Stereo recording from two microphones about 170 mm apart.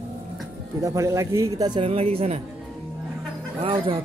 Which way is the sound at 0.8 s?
15° right (ahead or behind).